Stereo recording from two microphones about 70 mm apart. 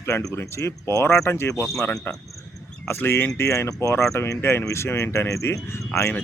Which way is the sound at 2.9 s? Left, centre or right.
Left.